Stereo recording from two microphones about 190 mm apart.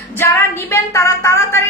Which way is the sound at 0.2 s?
15° left (ahead or behind).